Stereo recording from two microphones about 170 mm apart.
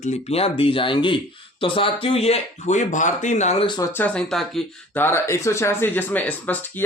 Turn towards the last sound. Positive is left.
turn(degrees=10)  # may be behind; listen again after turning